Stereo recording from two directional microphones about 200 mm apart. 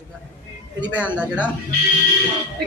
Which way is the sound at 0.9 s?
5° right (ahead or behind).